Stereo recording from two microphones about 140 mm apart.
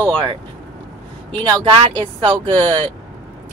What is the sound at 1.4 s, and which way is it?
Speech, 35° right (ahead or behind).